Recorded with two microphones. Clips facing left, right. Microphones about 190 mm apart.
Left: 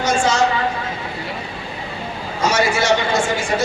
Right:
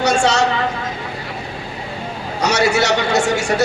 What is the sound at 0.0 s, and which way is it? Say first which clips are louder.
Vehicle: right 2 dB; 70° right (ahead or behind).